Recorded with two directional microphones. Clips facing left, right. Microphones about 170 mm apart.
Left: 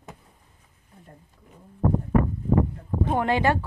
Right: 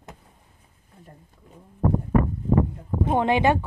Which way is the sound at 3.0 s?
20° right (ahead or behind).